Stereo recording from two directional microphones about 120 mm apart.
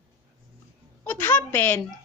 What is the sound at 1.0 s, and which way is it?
Speech, 20° left (ahead or behind).